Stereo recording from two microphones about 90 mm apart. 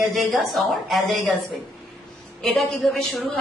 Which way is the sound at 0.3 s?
Centre (ahead or behind).